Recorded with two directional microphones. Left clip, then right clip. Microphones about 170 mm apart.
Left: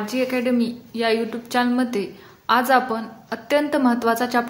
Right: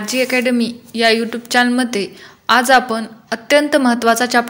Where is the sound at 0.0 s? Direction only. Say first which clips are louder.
Right 6 dB; 20° right (ahead or behind).